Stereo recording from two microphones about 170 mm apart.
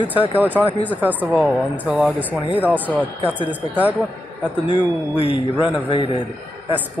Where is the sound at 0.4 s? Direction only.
10° right (ahead or behind).